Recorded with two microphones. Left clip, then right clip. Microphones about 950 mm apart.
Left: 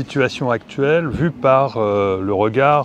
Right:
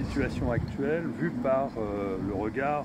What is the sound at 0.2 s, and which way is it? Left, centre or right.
Speech, left.